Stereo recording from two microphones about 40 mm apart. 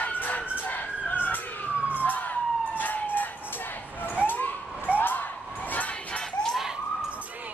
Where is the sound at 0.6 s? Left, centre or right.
Left.